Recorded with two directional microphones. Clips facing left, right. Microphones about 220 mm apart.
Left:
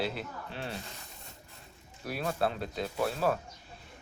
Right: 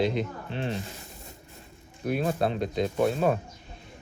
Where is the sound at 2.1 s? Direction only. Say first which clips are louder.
Right 4 dB; 20° right (ahead or behind).